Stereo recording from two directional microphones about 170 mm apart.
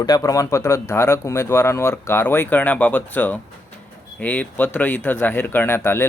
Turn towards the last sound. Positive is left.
turn(degrees=15)  # may be behind; listen again after turning